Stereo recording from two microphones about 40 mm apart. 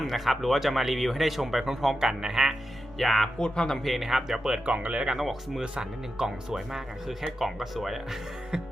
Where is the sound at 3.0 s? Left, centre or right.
Centre.